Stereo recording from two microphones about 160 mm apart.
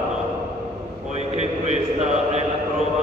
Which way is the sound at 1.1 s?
45° right (ahead or behind).